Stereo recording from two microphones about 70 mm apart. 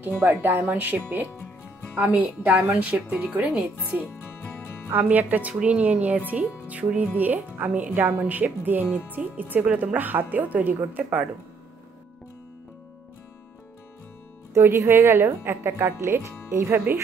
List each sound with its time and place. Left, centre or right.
0.0 s speech: right
2.0 s speech: centre
5.0 s speech: right
14.5 s a woman's voice: right